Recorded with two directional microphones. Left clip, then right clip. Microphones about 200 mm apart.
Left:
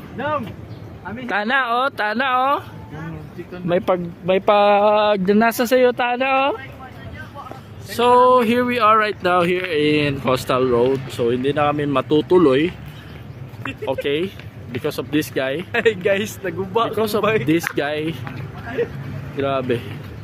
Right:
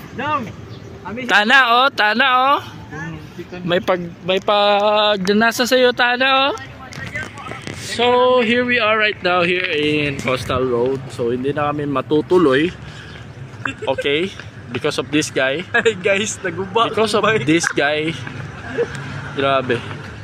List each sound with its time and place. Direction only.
1.2 s speech: 10° right (ahead or behind)
3.6 s speech: 10° left (ahead or behind)
4.3 s speech: 25° left (ahead or behind)
7.9 s speech: 10° left (ahead or behind)
14.0 s speech: centre (ahead or behind)
15.7 s speech: 20° left (ahead or behind)
16.0 s speech: 5° left (ahead or behind)
19.4 s speech: 5° left (ahead or behind)